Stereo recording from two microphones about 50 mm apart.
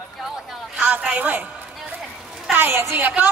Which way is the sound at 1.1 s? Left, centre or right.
Right.